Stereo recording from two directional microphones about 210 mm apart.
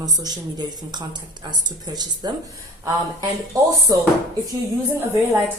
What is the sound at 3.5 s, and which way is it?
Speech, 15° right (ahead or behind).